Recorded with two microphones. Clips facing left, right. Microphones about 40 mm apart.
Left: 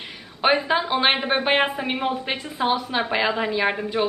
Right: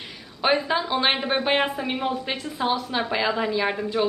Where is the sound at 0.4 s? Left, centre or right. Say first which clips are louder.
Left 2 dB; centre.